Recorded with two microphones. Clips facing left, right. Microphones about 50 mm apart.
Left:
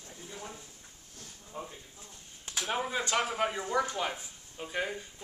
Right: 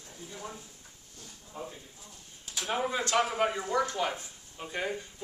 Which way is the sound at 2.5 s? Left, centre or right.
Centre.